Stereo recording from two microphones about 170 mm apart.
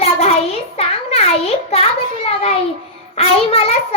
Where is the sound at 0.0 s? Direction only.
35° left (ahead or behind).